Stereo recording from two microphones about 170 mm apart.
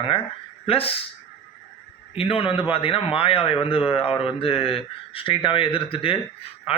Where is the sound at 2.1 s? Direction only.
35° left (ahead or behind).